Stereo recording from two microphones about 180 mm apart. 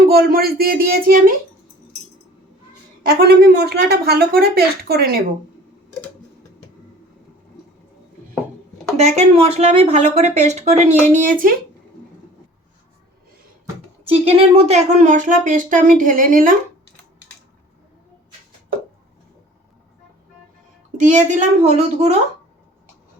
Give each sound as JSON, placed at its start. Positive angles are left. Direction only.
{"t": 0.0, "sound": "speech", "side_deg": -55}
{"t": 3.2, "sound": "speech", "side_deg": -65}
{"t": 9.0, "sound": "speech", "side_deg": -35}
{"t": 14.1, "sound": "speech", "side_deg": -30}
{"t": 21.0, "sound": "speech", "side_deg": -45}